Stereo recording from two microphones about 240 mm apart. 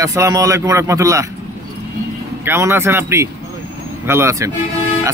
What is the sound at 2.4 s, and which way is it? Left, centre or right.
Speech, centre.